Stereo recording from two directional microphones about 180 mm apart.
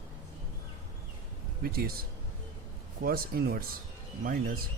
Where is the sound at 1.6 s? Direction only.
55° right (ahead or behind).